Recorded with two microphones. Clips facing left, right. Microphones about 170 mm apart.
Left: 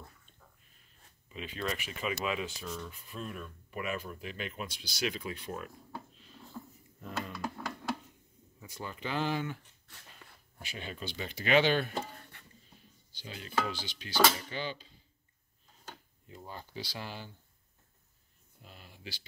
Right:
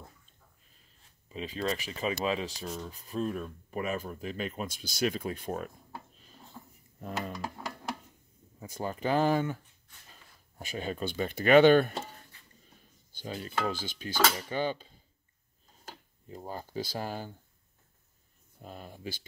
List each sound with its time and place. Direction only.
1.3 s speech: 30° right (ahead or behind)
7.0 s a sound: 40° right (ahead or behind)
8.5 s dishes: 45° right (ahead or behind)
9.9 s a sound: 85° left
10.6 s dishes: 45° right (ahead or behind)
13.1 s dishes: 45° right (ahead or behind)
16.3 s dishes: 40° right (ahead or behind)
18.6 s dishes: 45° right (ahead or behind)